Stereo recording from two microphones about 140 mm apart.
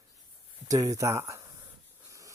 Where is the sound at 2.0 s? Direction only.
25° right (ahead or behind).